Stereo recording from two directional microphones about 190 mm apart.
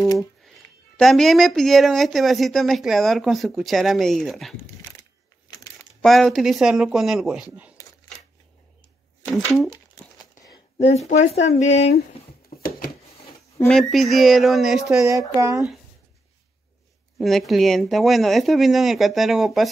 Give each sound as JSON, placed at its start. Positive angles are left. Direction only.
{"t": 0.9, "sound": "speech", "side_deg": 0}
{"t": 5.9, "sound": "speech", "side_deg": 0}
{"t": 9.2, "sound": "speech", "side_deg": 0}
{"t": 9.7, "sound": "crumpling", "side_deg": 20}
{"t": 10.9, "sound": "speech", "side_deg": 35}
{"t": 12.6, "sound": "a sound", "side_deg": 50}
{"t": 13.7, "sound": "speech", "side_deg": 0}
{"t": 15.0, "sound": "speech", "side_deg": -15}
{"t": 17.2, "sound": "speech", "side_deg": 0}